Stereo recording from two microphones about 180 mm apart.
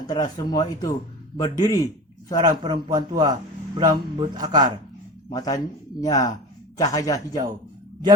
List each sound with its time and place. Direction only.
0.1 s speech: 20° left (ahead or behind)
2.4 s a man's voice: 25° right (ahead or behind)
5.3 s speech: 20° left (ahead or behind)